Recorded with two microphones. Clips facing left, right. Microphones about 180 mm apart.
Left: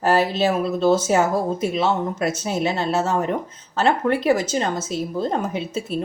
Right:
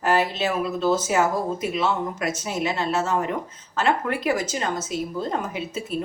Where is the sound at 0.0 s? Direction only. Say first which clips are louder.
Left 4 dB; 35° left (ahead or behind).